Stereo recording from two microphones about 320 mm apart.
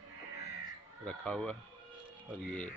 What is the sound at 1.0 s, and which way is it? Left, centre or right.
Speech, centre.